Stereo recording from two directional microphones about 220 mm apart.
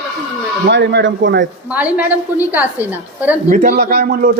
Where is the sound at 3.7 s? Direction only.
45° right (ahead or behind).